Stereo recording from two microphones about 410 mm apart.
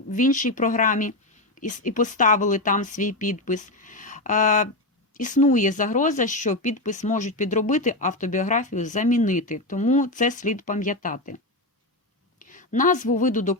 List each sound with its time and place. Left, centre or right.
0.1 s speech: centre
12.4 s a woman's voice: centre